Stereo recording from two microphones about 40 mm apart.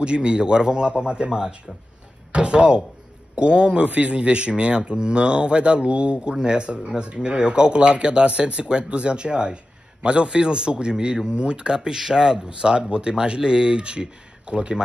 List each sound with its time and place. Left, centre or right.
0.0 s speech: right